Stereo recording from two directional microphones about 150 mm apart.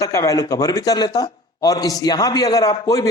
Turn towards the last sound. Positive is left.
turn(degrees=25)  # may be behind; listen again after turning